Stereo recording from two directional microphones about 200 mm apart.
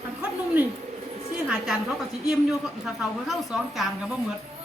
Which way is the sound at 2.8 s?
Centre (ahead or behind).